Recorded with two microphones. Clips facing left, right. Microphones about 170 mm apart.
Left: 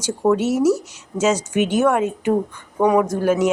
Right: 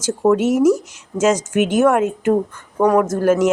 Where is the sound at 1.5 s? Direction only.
50° right (ahead or behind).